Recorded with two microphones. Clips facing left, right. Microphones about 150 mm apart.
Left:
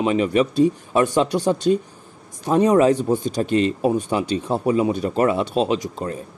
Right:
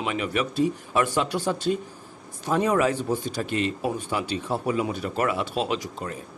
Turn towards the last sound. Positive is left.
turn(degrees=25)  # may be behind; listen again after turning